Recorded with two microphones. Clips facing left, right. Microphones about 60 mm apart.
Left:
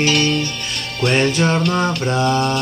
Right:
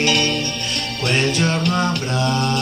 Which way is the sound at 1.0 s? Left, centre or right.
Centre.